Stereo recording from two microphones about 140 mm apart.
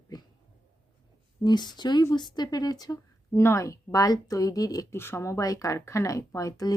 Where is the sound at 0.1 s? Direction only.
30° left (ahead or behind).